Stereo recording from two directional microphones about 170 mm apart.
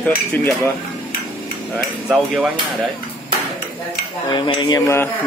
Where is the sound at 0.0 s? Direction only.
10° left (ahead or behind).